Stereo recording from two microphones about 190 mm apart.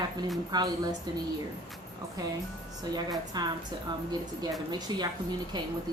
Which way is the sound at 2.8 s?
20° right (ahead or behind).